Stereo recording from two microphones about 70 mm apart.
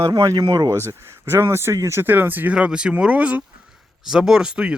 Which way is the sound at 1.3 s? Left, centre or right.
Right.